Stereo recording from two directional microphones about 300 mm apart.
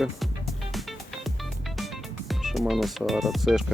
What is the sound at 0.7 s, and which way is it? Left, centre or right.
Music, centre.